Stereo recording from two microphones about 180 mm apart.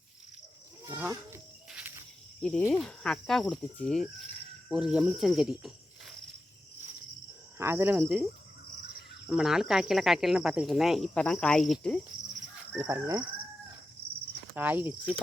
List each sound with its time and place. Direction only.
0.9 s livestock: 10° right (ahead or behind)
2.4 s speech: 5° left (ahead or behind)
7.6 s speech: 10° right (ahead or behind)
9.3 s speech: 5° right (ahead or behind)
12.9 s speech: 15° right (ahead or behind)
14.5 s speech: 10° right (ahead or behind)